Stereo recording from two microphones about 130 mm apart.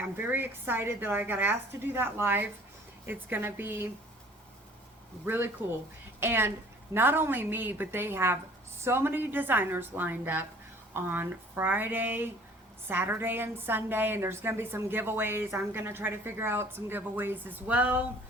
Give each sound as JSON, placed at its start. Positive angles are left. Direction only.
{"t": 0.0, "sound": "a woman's voice", "side_deg": -15}
{"t": 5.2, "sound": "a woman's voice", "side_deg": -15}